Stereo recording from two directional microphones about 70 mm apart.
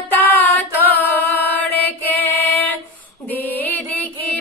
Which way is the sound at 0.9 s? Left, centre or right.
Left.